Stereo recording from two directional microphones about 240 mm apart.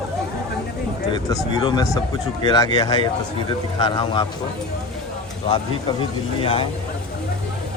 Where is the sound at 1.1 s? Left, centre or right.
Centre.